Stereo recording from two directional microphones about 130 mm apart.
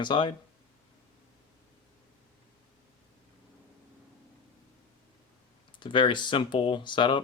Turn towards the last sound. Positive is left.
turn(degrees=40)  # may be behind; listen again after turning